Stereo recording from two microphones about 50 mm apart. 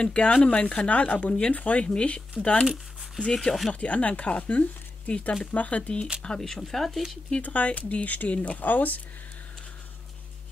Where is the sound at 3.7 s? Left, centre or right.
Left.